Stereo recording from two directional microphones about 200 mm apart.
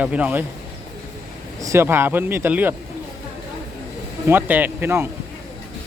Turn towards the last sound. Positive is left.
turn(degrees=-10)  # may be behind; listen again after turning